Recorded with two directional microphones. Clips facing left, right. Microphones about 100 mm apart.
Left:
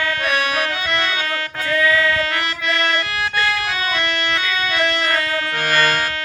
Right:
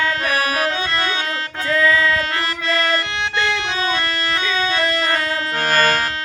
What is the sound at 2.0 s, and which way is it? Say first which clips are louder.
Music: even; 35° right (ahead or behind).